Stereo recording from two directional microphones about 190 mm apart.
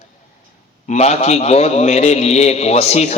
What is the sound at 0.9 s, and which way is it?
A man's voice, 35° left (ahead or behind).